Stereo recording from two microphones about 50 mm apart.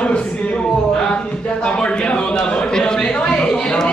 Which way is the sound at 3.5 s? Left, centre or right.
Centre.